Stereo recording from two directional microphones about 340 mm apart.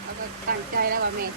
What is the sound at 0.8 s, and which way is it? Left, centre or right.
Speech, right.